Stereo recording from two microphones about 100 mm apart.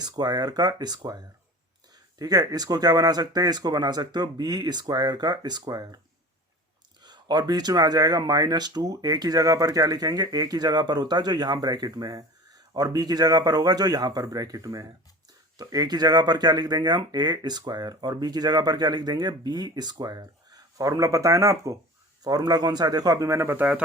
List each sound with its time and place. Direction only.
0.0 s speech: 45° right (ahead or behind)
7.0 s speech: 45° right (ahead or behind); by 23.8 s 15° right (ahead or behind)